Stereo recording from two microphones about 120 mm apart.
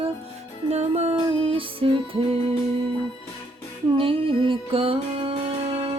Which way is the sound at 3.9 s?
45° right (ahead or behind).